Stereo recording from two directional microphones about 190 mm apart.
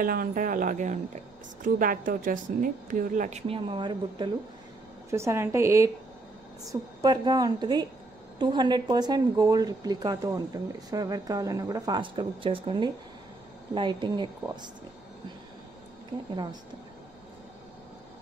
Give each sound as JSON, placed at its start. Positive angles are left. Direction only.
{"t": 0.0, "sound": "a woman's voice", "side_deg": -50}
{"t": 5.1, "sound": "a woman's voice", "side_deg": -15}